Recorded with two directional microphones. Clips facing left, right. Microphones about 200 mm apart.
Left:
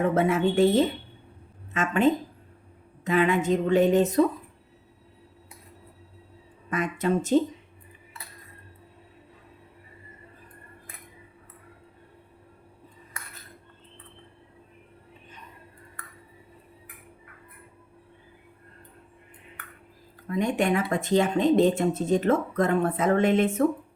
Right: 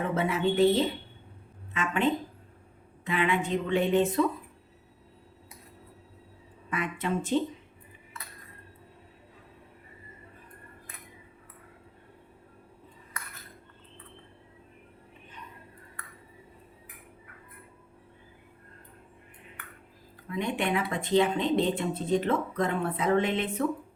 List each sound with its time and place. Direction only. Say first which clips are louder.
0.1 s speech: left 4 dB; 50° left (ahead or behind)
6.7 s speech: left 5 dB; 40° left (ahead or behind)
20.2 s speech: left 5 dB; 45° left (ahead or behind)